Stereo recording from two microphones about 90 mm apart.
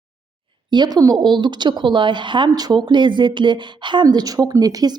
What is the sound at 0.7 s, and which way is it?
Speech, 50° right (ahead or behind).